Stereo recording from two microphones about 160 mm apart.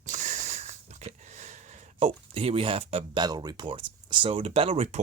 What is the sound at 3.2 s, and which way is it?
Speech, 25° right (ahead or behind).